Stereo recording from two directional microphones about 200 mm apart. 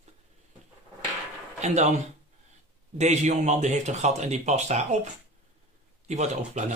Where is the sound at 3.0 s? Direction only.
35° right (ahead or behind).